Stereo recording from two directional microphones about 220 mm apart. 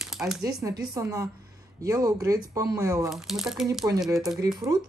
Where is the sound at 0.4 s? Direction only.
15° right (ahead or behind).